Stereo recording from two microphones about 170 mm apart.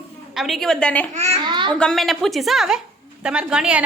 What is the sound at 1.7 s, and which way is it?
A woman's voice, 5° left (ahead or behind).